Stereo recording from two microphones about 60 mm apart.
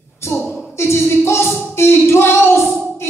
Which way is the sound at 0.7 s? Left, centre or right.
Left.